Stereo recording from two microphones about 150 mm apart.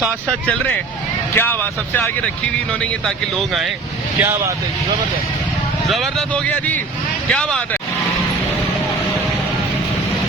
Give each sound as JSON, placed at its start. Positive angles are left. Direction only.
{"t": 1.4, "sound": "speech", "side_deg": 15}
{"t": 3.3, "sound": "speech", "side_deg": 0}
{"t": 4.2, "sound": "speech", "side_deg": -15}
{"t": 5.9, "sound": "speech", "side_deg": 0}